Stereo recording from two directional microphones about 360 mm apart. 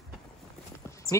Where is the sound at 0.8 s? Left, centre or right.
Centre.